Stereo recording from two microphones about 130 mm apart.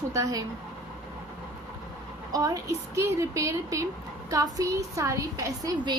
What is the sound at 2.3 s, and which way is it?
A woman's voice, 25° right (ahead or behind).